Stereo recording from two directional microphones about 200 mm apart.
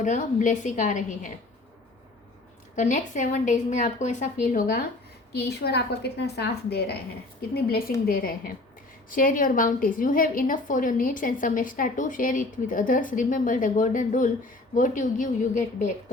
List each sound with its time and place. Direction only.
0.0 s a woman's voice: 40° left (ahead or behind)
2.7 s a woman's voice: 40° left (ahead or behind)